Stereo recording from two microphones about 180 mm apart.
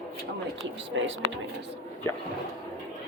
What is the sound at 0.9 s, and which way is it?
Speech, 90° right.